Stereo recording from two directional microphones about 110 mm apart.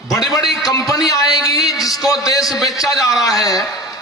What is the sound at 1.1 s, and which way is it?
Speech, 35° left (ahead or behind).